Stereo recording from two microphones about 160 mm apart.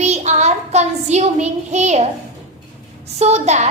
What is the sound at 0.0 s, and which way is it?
Child singing, 45° right (ahead or behind).